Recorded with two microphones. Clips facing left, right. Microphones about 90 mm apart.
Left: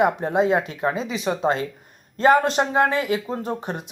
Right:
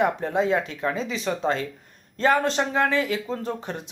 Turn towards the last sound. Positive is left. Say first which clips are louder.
# left 2 dB
turn(degrees=15)  # may be behind; listen again after turning